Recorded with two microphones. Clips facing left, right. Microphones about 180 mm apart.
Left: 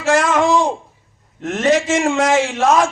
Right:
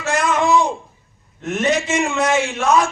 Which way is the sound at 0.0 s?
90° left.